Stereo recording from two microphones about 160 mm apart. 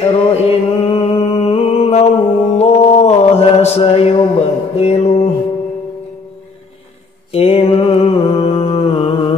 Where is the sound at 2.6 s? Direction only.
40° left (ahead or behind).